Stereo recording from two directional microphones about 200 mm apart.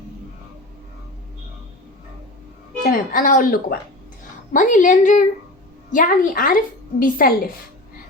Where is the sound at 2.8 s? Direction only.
45° left (ahead or behind).